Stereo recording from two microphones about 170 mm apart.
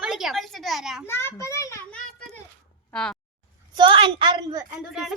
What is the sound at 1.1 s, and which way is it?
Speech, 15° left (ahead or behind).